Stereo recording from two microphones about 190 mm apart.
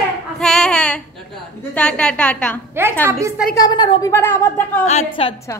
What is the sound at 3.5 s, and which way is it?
Speech, 20° left (ahead or behind).